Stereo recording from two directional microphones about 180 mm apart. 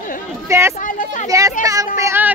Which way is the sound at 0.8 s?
45° left (ahead or behind).